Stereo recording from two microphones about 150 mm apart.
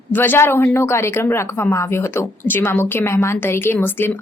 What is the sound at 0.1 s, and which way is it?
A woman's voice, 15° left (ahead or behind).